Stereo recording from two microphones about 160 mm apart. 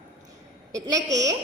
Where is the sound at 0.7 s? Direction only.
20° right (ahead or behind).